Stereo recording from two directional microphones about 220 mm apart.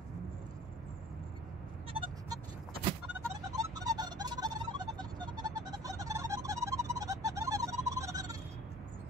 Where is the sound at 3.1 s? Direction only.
15° right (ahead or behind).